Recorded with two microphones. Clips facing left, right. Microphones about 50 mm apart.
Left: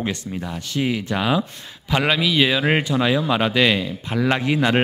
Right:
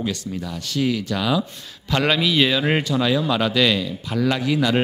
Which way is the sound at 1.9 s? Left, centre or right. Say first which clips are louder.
Even; centre.